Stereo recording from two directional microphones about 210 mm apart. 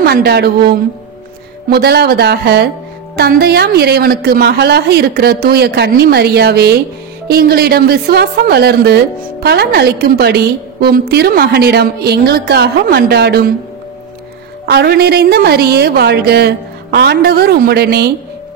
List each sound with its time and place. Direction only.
0.0 s a woman's voice: 50° right (ahead or behind)
14.7 s a woman's voice: 50° right (ahead or behind)